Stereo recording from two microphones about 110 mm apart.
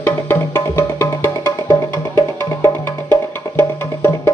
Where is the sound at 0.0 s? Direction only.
20° left (ahead or behind).